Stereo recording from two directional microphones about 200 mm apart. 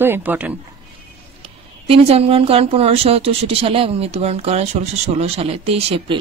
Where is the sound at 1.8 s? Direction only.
30° right (ahead or behind).